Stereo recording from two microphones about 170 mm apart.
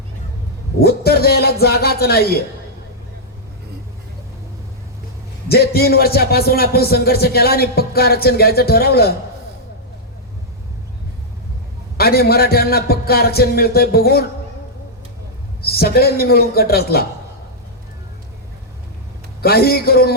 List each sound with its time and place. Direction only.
0.8 s a man's voice: 65° left (ahead or behind)
5.5 s a man's voice: 65° left (ahead or behind)
11.9 s a man's voice: 65° left (ahead or behind)
15.6 s a man's voice: 65° left (ahead or behind)
19.4 s a man's voice: 65° left (ahead or behind)